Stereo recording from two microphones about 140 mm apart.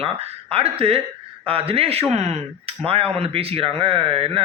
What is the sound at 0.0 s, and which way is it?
A man's voice, 45° right (ahead or behind).